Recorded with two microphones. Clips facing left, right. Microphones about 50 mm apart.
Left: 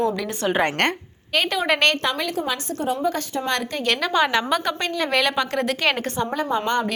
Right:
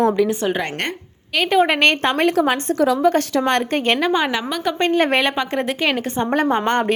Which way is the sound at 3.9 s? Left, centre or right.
Right.